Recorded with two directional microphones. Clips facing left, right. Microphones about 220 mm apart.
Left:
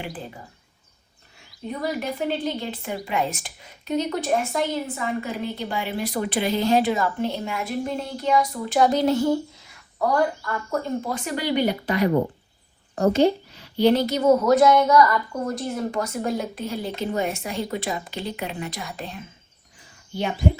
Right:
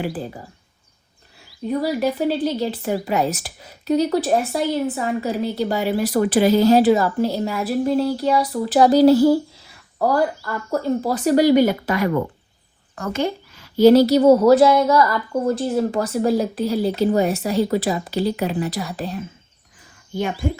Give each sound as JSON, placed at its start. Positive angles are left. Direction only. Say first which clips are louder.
{"t": 1.6, "sound": "speech", "louder": "right 7 dB", "side_deg": -35}
{"t": 10.4, "sound": "speech", "louder": "right 4 dB", "side_deg": -35}
{"t": 13.5, "sound": "speech", "louder": "right 7 dB", "side_deg": -45}